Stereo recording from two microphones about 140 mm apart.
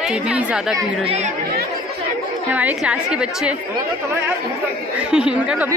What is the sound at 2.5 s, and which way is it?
Speech, 10° right (ahead or behind).